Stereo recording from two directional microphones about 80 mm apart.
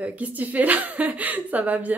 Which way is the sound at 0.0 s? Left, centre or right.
Centre.